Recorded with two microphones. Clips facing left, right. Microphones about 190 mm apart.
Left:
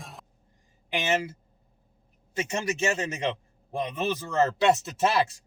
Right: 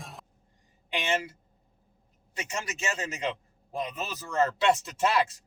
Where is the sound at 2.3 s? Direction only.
25° left (ahead or behind).